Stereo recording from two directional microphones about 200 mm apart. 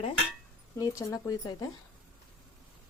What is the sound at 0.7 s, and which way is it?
Speech, 15° left (ahead or behind).